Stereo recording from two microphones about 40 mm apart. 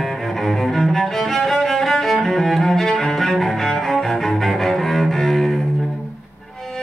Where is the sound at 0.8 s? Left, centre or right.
Centre.